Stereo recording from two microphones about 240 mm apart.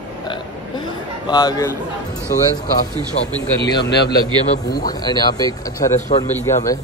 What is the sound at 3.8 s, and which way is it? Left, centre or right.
Speech, left.